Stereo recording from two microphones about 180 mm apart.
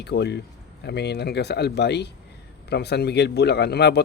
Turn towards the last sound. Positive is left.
turn(degrees=65)  # may be behind; listen again after turning